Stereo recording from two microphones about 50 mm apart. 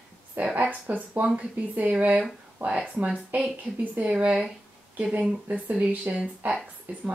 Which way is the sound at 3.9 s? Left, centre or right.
Right.